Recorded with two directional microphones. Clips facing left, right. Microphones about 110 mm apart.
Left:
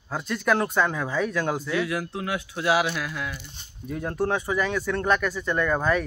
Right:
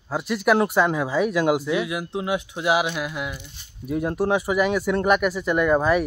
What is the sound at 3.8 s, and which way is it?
Speech, 10° right (ahead or behind).